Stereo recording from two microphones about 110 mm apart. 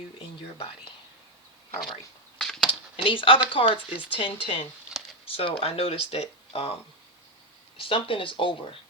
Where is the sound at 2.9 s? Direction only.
55° left (ahead or behind).